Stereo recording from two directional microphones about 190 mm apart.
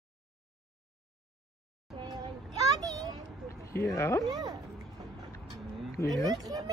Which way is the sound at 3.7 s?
15° left (ahead or behind).